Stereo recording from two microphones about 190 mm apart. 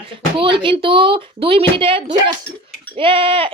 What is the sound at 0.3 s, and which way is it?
Speech, 25° right (ahead or behind).